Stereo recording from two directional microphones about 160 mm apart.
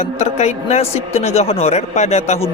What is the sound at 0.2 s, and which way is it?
Speech, 45° left (ahead or behind).